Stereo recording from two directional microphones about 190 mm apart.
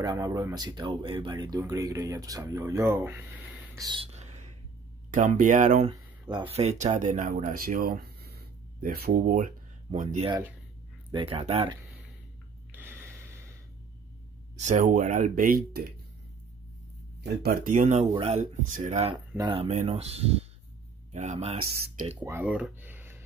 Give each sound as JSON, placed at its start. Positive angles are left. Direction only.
{"t": 0.0, "sound": "speech", "side_deg": -20}
{"t": 3.8, "sound": "whispering", "side_deg": -25}
{"t": 5.1, "sound": "speech", "side_deg": -40}
{"t": 9.9, "sound": "speech", "side_deg": -30}
{"t": 11.1, "sound": "speech", "side_deg": -25}
{"t": 12.7, "sound": "a sound", "side_deg": -10}
{"t": 14.6, "sound": "speech", "side_deg": -40}
{"t": 17.2, "sound": "speech", "side_deg": -55}
{"t": 19.1, "sound": "speech", "side_deg": -20}
{"t": 22.2, "sound": "speech", "side_deg": -10}